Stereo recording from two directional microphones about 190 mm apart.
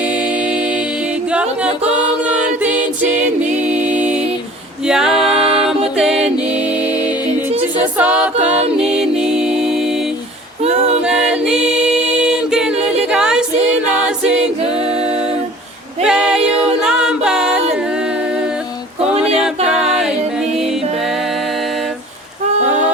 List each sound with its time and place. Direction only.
1.3 s a capella: 5° right (ahead or behind)
3.7 s music: 5° right (ahead or behind)
7.9 s a capella: 10° right (ahead or behind)
8.8 s music: 5° right (ahead or behind)
10.6 s a capella: 35° right (ahead or behind)
11.0 s a capella: 5° right (ahead or behind)
16.0 s a capella: 5° right (ahead or behind)
16.8 s music: 5° right (ahead or behind)
19.4 s a capella: 5° right (ahead or behind)